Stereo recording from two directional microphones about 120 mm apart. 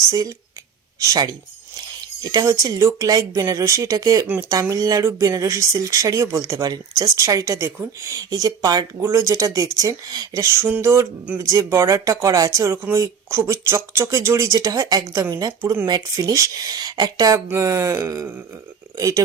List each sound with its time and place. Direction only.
0.1 s speech: 30° right (ahead or behind)
9.0 s speech: 25° right (ahead or behind)